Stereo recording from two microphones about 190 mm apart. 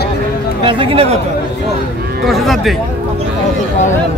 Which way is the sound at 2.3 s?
Centre (ahead or behind).